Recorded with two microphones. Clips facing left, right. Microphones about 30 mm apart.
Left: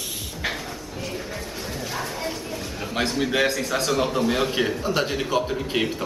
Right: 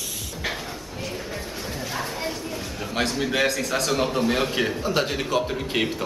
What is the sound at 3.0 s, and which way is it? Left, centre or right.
A man's voice, centre.